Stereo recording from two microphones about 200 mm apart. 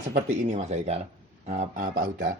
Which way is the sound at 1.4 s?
35° right (ahead or behind).